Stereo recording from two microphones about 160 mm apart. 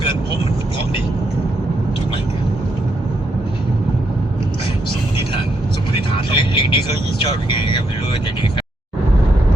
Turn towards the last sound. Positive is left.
turn(degrees=30)  # may be behind; listen again after turning